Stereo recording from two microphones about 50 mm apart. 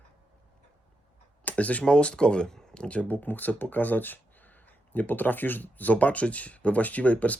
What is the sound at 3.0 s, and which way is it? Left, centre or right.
Speech, left.